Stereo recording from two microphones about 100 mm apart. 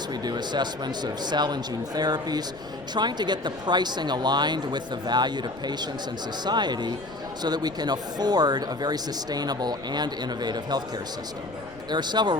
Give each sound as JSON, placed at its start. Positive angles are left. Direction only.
{"t": 0.1, "sound": "speech", "side_deg": -45}
{"t": 11.9, "sound": "speech", "side_deg": -45}